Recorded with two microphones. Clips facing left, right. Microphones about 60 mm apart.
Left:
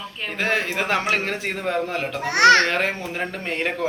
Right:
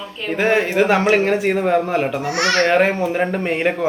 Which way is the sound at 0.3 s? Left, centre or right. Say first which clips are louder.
Right 7 dB; centre.